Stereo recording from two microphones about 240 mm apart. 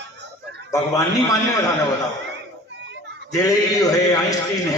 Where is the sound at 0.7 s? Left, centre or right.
Centre.